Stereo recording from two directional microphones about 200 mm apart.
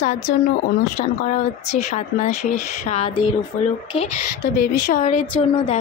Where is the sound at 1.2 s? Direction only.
35° left (ahead or behind).